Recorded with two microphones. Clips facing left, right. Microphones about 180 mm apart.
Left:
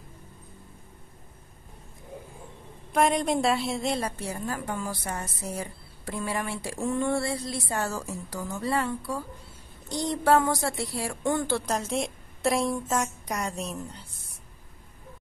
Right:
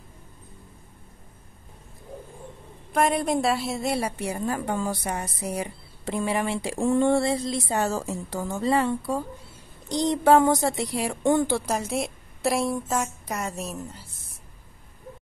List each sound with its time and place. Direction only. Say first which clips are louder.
2.9 s a woman's voice: right 1 dB; centre (ahead or behind)